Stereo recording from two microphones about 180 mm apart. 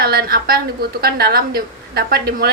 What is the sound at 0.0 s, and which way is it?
Speech, 60° right (ahead or behind).